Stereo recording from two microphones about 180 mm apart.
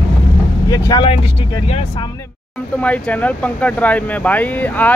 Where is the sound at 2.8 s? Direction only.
10° left (ahead or behind).